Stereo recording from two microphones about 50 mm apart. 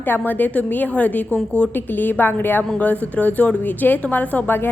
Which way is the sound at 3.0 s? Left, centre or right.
Left.